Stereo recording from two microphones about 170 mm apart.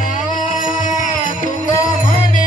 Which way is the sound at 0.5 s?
50° left (ahead or behind).